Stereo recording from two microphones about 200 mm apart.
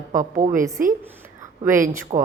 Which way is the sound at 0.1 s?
40° right (ahead or behind).